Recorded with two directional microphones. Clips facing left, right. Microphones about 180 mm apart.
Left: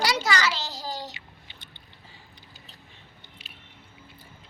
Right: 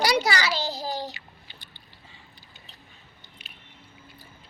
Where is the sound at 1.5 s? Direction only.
20° left (ahead or behind).